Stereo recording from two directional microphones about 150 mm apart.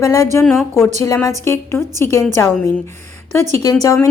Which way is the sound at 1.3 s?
15° left (ahead or behind).